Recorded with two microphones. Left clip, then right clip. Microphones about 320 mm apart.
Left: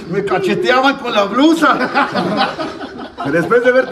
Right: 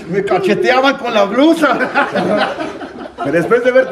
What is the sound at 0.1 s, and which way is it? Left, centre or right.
A man's voice, centre.